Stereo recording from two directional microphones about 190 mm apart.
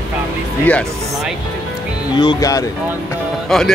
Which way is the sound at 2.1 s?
20° left (ahead or behind).